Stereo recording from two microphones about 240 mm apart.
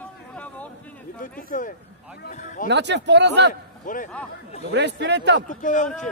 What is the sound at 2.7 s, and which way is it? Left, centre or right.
Speech, right.